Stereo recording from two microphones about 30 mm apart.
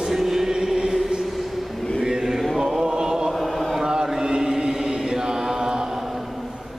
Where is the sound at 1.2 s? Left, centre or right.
Centre.